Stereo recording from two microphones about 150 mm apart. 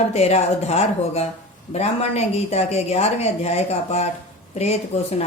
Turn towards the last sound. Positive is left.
turn(degrees=45)  # may be behind; listen again after turning